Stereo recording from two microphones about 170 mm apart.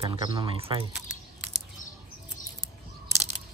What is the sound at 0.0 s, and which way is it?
Speech, 25° right (ahead or behind).